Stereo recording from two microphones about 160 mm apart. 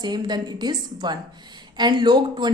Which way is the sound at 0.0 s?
25° right (ahead or behind).